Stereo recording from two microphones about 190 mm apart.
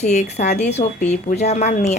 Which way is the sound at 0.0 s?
40° left (ahead or behind).